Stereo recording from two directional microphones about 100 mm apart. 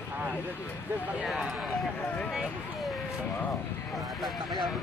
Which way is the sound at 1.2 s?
5° right (ahead or behind).